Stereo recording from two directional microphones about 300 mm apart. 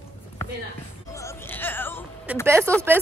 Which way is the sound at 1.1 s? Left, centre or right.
Centre.